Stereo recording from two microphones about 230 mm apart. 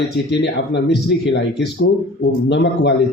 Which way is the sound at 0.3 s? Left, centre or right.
Left.